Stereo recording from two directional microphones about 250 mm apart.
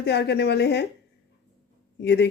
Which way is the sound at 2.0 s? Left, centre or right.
Left.